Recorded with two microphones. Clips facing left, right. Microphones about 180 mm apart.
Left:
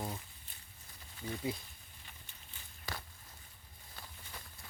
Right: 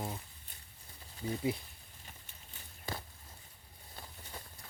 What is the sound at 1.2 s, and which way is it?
Speech, 30° right (ahead or behind).